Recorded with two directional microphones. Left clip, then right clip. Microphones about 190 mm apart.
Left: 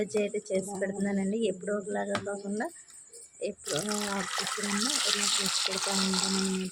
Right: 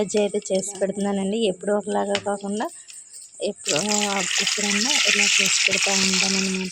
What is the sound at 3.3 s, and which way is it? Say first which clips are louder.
Speech: right 9 dB; 25° right (ahead or behind).